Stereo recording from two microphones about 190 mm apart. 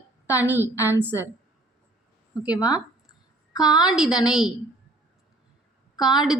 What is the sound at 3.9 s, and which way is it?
Speech, centre (ahead or behind).